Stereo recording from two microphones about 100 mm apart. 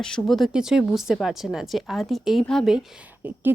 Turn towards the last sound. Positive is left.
turn(degrees=-15)  # may be behind; listen again after turning